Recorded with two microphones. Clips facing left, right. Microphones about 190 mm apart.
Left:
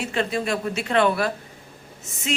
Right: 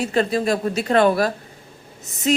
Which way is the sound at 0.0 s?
40° right (ahead or behind).